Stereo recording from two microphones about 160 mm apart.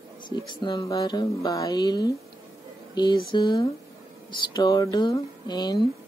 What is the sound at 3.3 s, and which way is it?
Speech, 25° left (ahead or behind).